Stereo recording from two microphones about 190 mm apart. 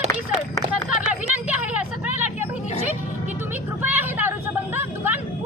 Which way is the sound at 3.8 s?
10° right (ahead or behind).